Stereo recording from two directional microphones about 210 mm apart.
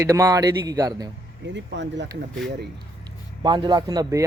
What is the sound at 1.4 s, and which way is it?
Speech, 60° right (ahead or behind).